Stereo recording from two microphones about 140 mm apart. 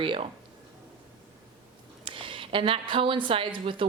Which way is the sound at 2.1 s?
40° right (ahead or behind).